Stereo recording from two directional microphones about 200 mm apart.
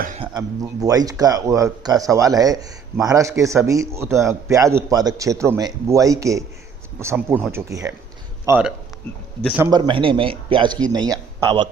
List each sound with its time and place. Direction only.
0.2 s speech: 20° right (ahead or behind)
9.6 s a man's voice: 25° right (ahead or behind)